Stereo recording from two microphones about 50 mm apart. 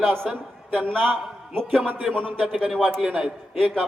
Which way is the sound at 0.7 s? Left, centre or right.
Centre.